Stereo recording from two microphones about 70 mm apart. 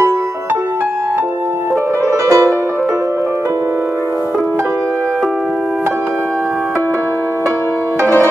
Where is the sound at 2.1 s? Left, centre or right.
Right.